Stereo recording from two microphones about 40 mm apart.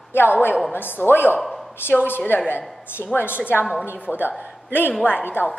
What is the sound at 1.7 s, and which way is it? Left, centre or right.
Speech, left.